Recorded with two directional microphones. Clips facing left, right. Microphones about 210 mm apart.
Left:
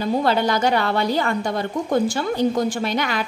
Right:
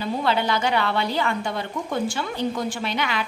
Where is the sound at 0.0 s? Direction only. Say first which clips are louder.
Left 4 dB; 40° left (ahead or behind).